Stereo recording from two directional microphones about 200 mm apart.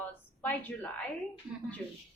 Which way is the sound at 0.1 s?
10° left (ahead or behind).